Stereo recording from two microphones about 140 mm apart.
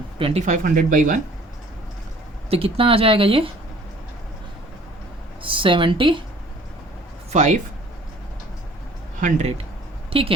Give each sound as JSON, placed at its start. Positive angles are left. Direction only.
{"t": 0.2, "sound": "speech", "side_deg": -45}
{"t": 0.4, "sound": "speech", "side_deg": -70}
{"t": 2.5, "sound": "speech", "side_deg": -45}
{"t": 5.4, "sound": "speech", "side_deg": -40}
{"t": 7.3, "sound": "speech", "side_deg": -60}
{"t": 10.1, "sound": "speech", "side_deg": -40}